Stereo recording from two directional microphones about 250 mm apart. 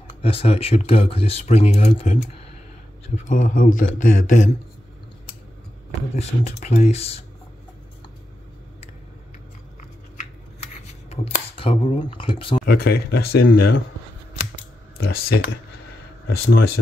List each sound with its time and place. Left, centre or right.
0.2 s speech: left
3.3 s speech: left
6.1 s speech: left
11.1 s speech: left
12.6 s speech: left
15.0 s speech: left